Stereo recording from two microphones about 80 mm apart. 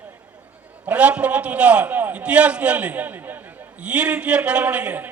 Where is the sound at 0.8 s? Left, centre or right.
Centre.